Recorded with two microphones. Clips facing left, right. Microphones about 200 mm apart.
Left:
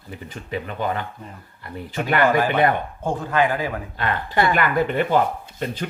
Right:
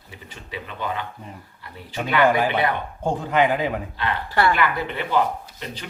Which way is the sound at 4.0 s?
50° left (ahead or behind).